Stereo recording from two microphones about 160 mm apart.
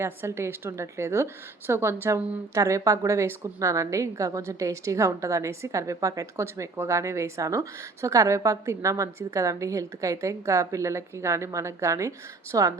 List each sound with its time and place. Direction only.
0.0 s a woman's voice: 15° right (ahead or behind)